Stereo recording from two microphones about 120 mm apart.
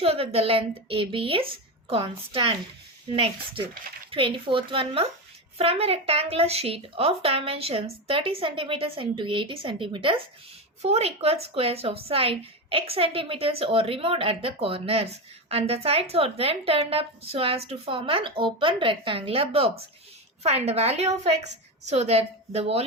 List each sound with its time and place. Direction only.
0.0 s a woman's voice: 55° right (ahead or behind)
4.1 s a woman's voice: 45° right (ahead or behind)
10.8 s a woman's voice: 60° right (ahead or behind)